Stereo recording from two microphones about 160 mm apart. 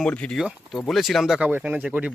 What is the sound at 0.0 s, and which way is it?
Speech, 5° left (ahead or behind).